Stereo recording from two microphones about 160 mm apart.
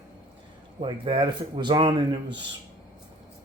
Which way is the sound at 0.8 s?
35° right (ahead or behind).